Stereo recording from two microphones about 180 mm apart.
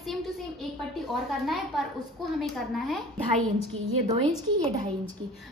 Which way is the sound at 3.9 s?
35° right (ahead or behind).